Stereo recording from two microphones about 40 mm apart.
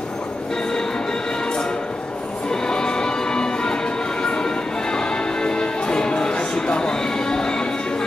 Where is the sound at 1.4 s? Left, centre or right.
Centre.